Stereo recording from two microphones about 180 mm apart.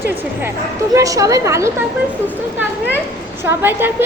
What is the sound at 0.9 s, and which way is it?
Speech, 20° right (ahead or behind).